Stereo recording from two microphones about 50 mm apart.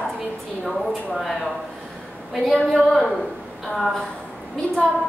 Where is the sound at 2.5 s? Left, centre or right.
Centre.